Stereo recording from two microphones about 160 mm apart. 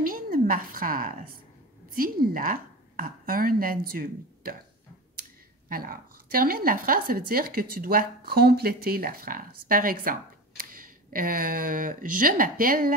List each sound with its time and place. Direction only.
0.0 s a woman's voice: 60° right (ahead or behind)
5.7 s a woman's voice: 65° right (ahead or behind)